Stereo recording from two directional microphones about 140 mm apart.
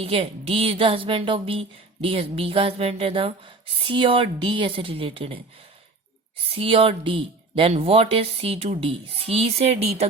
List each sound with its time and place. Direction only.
0.0 s speech: 45° right (ahead or behind)
6.5 s speech: 45° right (ahead or behind)